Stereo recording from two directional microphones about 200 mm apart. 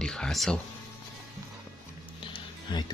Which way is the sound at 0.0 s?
5° left (ahead or behind).